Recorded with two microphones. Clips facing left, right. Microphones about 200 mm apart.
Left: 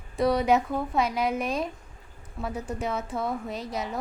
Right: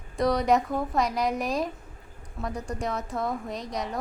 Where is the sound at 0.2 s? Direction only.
5° left (ahead or behind).